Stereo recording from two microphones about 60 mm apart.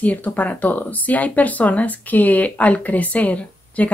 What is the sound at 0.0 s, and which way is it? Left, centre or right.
Speech, left.